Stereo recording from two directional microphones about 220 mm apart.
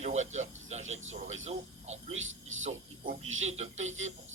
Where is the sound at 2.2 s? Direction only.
65° right (ahead or behind).